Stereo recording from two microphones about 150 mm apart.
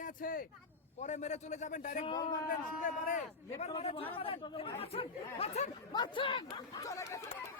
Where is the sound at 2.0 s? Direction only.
30° left (ahead or behind).